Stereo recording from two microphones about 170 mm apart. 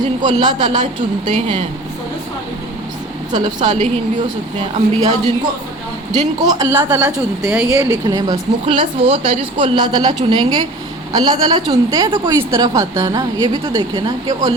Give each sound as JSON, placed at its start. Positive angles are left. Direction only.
{"t": 0.2, "sound": "speech", "side_deg": -25}
{"t": 3.3, "sound": "speech", "side_deg": -25}
{"t": 4.9, "sound": "speech", "side_deg": -20}